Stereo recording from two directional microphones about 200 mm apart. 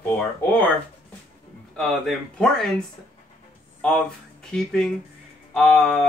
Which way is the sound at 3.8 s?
5° left (ahead or behind).